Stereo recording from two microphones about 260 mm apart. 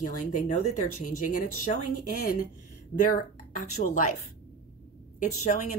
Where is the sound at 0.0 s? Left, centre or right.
Left.